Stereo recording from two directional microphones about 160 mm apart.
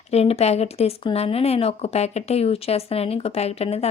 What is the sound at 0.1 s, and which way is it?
Speech, 40° left (ahead or behind).